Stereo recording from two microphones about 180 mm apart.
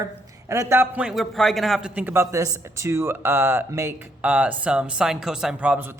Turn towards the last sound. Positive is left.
turn(degrees=-10)  # may be behind; listen again after turning